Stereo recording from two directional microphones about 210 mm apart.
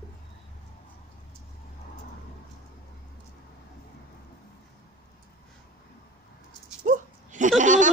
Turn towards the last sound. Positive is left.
turn(degrees=-35)  # may be behind; listen again after turning